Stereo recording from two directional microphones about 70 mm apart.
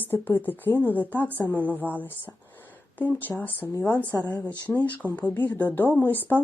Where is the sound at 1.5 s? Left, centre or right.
Right.